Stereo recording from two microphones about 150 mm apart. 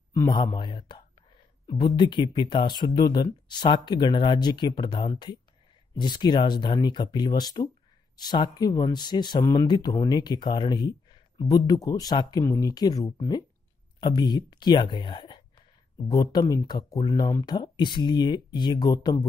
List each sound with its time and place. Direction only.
0.1 s speech: 20° left (ahead or behind)
0.4 s speech: 30° left (ahead or behind)